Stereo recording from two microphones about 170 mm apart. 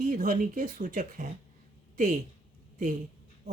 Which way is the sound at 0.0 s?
55° right (ahead or behind).